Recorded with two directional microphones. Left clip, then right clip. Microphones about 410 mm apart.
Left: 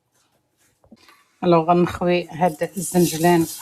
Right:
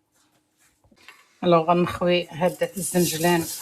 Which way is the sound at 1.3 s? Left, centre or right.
Left.